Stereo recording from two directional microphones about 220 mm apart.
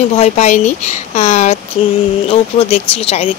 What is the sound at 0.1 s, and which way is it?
Speech, 30° left (ahead or behind).